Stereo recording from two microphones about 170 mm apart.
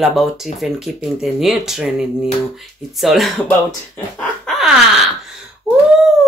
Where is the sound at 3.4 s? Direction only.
10° left (ahead or behind).